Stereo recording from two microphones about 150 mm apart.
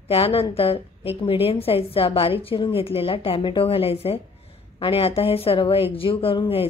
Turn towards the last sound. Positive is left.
turn(degrees=35)  # may be behind; listen again after turning